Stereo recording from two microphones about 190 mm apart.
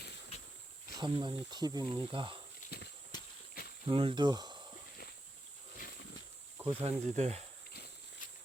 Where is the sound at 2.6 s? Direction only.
40° left (ahead or behind).